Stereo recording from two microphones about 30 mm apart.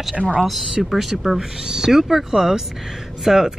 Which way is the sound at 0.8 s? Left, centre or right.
Centre.